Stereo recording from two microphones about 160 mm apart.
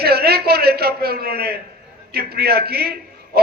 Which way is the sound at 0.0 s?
80° right.